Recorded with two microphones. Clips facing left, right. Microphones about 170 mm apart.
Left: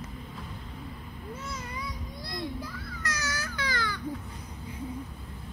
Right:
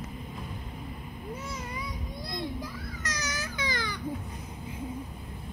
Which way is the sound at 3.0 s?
20° right (ahead or behind).